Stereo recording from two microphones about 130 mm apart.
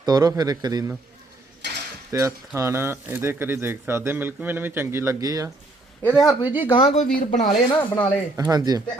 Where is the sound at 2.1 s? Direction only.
25° right (ahead or behind).